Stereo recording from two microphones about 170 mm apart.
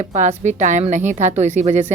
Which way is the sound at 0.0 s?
45° right (ahead or behind).